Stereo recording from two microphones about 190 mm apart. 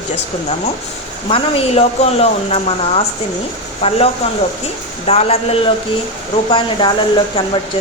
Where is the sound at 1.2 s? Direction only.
30° left (ahead or behind).